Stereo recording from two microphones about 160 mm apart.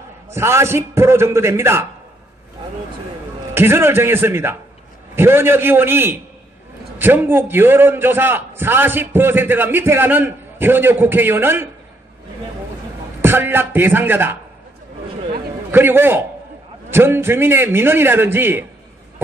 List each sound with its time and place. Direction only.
0.3 s a man's voice: 15° right (ahead or behind)
3.5 s a man's voice: 15° right (ahead or behind)
13.2 s a man's voice: 15° right (ahead or behind)
15.7 s a man's voice: 15° right (ahead or behind)